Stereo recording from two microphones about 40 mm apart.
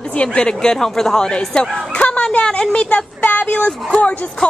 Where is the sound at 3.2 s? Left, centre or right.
Left.